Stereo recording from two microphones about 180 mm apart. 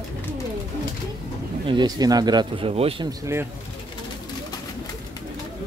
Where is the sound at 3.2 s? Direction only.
15° right (ahead or behind).